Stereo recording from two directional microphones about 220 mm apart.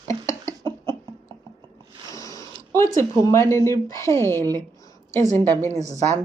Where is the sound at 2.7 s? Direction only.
15° left (ahead or behind).